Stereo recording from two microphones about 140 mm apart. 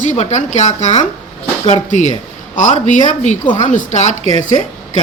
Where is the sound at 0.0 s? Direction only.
60° left (ahead or behind).